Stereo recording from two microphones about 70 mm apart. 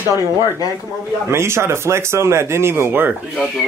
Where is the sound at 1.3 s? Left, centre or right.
Right.